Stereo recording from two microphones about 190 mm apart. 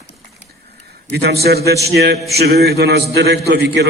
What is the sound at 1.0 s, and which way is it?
A man's voice, 60° right (ahead or behind).